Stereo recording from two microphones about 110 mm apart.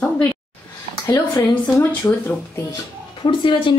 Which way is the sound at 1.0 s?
40° left (ahead or behind).